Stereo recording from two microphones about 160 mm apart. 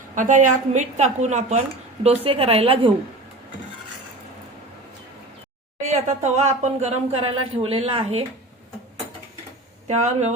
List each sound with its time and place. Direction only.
0.2 s a woman's voice: 50° right (ahead or behind); by 2.9 s 35° right (ahead or behind)
5.8 s speech: 45° right (ahead or behind)
9.8 s speech: 45° right (ahead or behind)